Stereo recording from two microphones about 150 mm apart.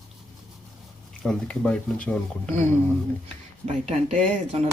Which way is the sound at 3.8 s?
50° right (ahead or behind).